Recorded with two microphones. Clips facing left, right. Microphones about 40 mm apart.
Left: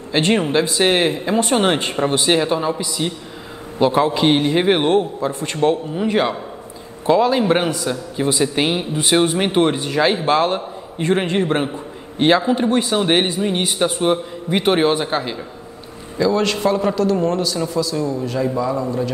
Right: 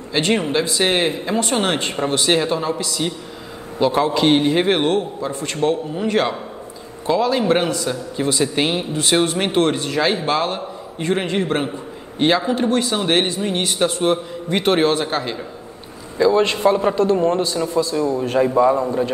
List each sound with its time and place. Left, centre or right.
0.2 s a man's voice: left
4.8 s speech: left
5.9 s a man's voice: centre
7.1 s a man's voice: left
11.3 s a man's voice: centre
12.6 s speech: left
12.9 s a man's voice: centre
16.2 s a man's voice: centre